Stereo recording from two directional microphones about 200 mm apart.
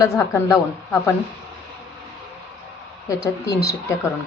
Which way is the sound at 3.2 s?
15° left (ahead or behind).